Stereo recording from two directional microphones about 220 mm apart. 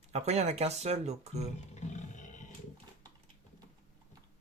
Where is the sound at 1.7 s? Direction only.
30° left (ahead or behind).